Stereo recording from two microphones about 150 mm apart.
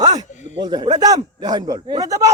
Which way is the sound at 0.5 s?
30° right (ahead or behind).